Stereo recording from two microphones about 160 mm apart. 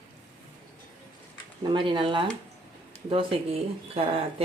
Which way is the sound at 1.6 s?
30° right (ahead or behind).